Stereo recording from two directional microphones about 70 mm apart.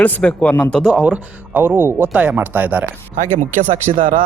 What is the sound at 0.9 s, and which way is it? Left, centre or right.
A man's voice, centre.